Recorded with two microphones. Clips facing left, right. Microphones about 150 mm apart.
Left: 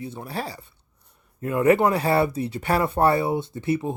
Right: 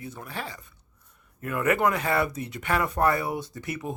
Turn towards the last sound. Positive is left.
turn(degrees=30)  # may be behind; listen again after turning